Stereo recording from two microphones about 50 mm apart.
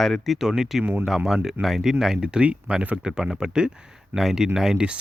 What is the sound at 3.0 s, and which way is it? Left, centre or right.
Speech, centre.